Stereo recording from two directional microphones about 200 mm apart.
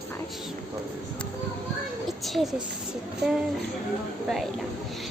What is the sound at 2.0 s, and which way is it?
Speech, centre (ahead or behind).